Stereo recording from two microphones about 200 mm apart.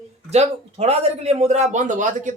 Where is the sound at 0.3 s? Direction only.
30° right (ahead or behind).